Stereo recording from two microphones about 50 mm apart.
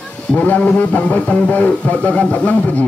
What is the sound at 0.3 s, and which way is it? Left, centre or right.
A man's voice, left.